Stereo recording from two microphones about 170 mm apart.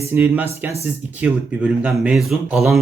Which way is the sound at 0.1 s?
10° right (ahead or behind).